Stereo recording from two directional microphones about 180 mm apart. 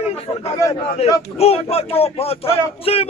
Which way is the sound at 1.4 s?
35° left (ahead or behind).